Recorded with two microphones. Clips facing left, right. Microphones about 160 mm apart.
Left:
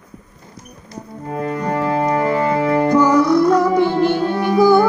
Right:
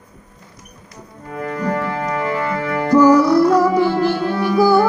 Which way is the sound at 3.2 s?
5° right (ahead or behind).